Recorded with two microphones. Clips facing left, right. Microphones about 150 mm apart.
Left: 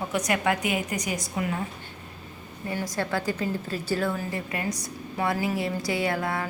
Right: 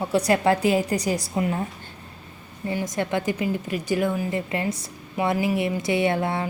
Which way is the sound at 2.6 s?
20° right (ahead or behind).